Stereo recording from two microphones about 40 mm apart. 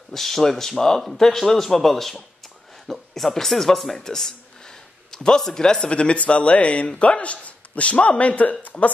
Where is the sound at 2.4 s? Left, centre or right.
Centre.